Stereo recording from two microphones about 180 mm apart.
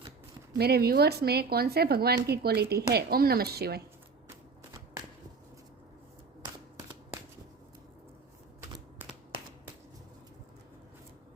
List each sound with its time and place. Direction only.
0.6 s speech: 60° right (ahead or behind)